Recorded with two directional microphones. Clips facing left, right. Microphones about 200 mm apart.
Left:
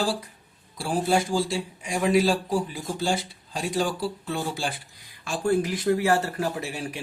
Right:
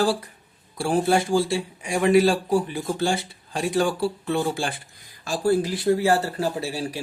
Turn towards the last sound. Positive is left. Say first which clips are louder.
# right 4 dB
turn(degrees=-35)  # may be behind; listen again after turning